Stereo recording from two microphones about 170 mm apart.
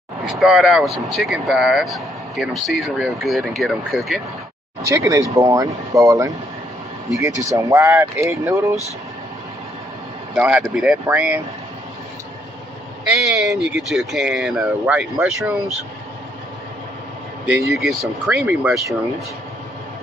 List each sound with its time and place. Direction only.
0.2 s speech: centre (ahead or behind)
4.8 s speech: 20° right (ahead or behind)
10.3 s speech: 5° right (ahead or behind)
13.1 s speech: centre (ahead or behind)
17.5 s speech: 15° right (ahead or behind)
17.7 s speech: centre (ahead or behind)